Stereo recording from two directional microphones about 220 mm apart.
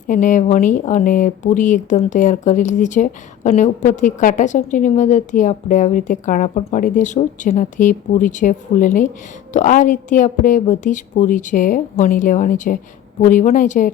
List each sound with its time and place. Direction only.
0.1 s speech: 35° left (ahead or behind)